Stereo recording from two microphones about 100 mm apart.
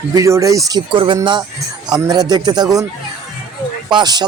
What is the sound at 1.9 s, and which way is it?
Speech, 40° right (ahead or behind).